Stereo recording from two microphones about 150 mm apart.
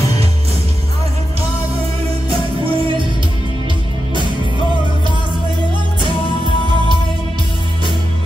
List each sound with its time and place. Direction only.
2.2 s music: 35° right (ahead or behind)